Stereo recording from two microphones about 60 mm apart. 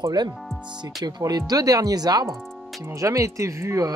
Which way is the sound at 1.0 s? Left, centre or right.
Right.